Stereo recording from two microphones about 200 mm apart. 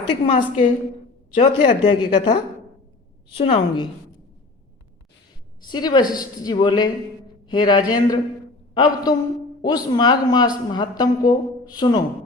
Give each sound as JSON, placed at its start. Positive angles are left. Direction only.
{"t": 0.3, "sound": "a woman's voice", "side_deg": 40}
{"t": 1.4, "sound": "a woman's voice", "side_deg": 25}
{"t": 5.6, "sound": "a woman's voice", "side_deg": 20}